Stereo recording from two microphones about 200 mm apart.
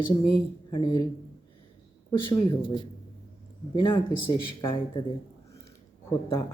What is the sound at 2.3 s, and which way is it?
Speech, 25° left (ahead or behind).